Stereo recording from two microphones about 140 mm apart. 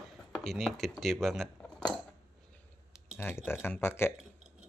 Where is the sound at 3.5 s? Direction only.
15° left (ahead or behind).